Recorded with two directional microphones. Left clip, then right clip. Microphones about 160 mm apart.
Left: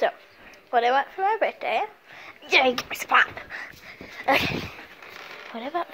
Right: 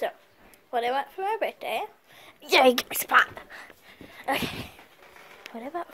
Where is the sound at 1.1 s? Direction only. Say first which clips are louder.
Left 5 dB; 25° right (ahead or behind).